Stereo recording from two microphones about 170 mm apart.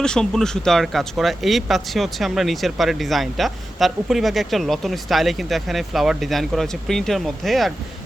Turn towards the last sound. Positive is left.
turn(degrees=0)  # may be behind; listen again after turning